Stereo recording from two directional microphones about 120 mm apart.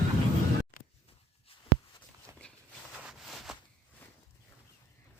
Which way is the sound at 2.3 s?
25° right (ahead or behind).